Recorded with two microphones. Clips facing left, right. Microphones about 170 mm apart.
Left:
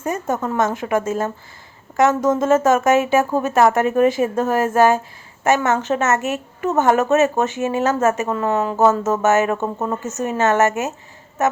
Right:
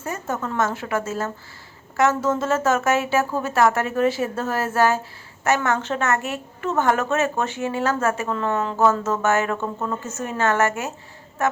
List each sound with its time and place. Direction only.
0.0 s a woman's voice: 15° left (ahead or behind)
10.0 s a woman's voice: 40° left (ahead or behind)
10.2 s speech: 20° left (ahead or behind)